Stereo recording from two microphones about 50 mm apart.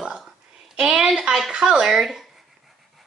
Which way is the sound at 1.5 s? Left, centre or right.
Centre.